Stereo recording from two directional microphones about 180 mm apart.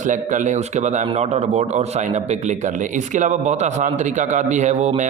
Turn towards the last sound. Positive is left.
turn(degrees=-40)  # may be behind; listen again after turning